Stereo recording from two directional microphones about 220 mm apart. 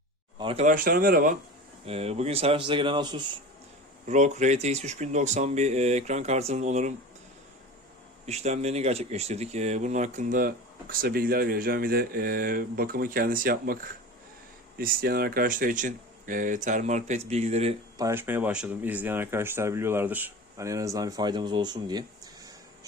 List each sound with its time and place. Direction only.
0.3 s speech: 25° right (ahead or behind)
1.9 s speech: 30° right (ahead or behind)
4.0 s speech: 30° right (ahead or behind)
8.3 s speech: 30° right (ahead or behind)
14.8 s speech: 45° right (ahead or behind); by 17.7 s 30° right (ahead or behind)
17.9 s speech: 10° right (ahead or behind)